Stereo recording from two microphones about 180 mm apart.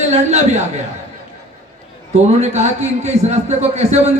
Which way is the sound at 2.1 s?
40° right (ahead or behind).